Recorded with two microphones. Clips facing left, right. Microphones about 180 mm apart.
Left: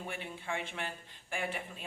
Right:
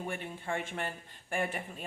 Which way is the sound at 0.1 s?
45° right (ahead or behind).